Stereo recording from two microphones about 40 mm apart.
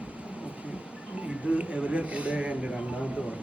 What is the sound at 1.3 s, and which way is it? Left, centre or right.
A man's voice, right.